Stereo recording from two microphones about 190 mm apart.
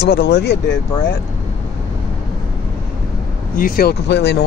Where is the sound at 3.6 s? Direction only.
50° left (ahead or behind).